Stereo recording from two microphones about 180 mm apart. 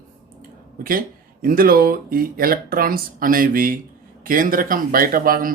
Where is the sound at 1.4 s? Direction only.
50° right (ahead or behind).